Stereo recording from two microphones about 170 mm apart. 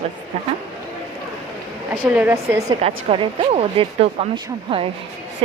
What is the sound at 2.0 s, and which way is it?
Speech, 10° right (ahead or behind).